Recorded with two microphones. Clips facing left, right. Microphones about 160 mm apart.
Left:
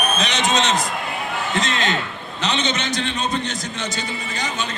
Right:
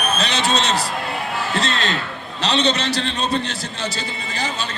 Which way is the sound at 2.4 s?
35° right (ahead or behind).